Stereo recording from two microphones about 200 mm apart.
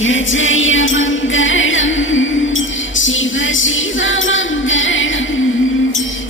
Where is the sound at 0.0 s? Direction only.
75° left (ahead or behind).